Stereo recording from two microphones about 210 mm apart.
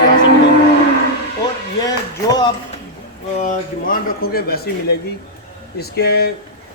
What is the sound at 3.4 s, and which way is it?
Speech, 40° left (ahead or behind).